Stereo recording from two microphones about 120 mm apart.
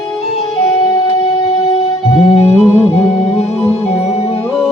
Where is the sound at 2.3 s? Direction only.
55° left (ahead or behind).